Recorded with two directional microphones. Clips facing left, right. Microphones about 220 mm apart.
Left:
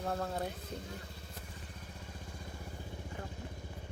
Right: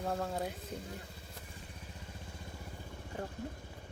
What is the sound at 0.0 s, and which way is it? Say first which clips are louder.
Speech: even; centre (ahead or behind).